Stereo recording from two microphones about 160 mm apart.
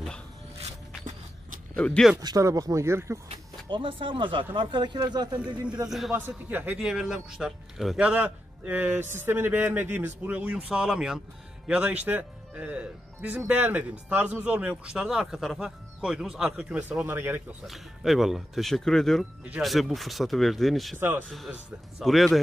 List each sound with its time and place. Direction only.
1.8 s speech: 5° left (ahead or behind)
2.2 s speech: 20° right (ahead or behind)
3.3 s speech: 30° right (ahead or behind)
5.9 s a man's voice: centre (ahead or behind)
17.6 s speech: centre (ahead or behind)
22.0 s speech: centre (ahead or behind)